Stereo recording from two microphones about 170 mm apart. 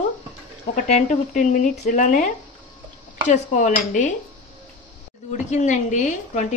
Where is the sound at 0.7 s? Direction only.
45° left (ahead or behind).